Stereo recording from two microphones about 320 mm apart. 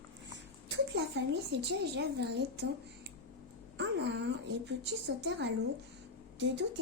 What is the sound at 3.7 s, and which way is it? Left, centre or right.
Speech, right.